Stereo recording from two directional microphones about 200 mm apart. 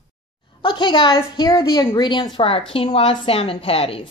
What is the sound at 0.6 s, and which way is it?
A woman's voice, 25° left (ahead or behind).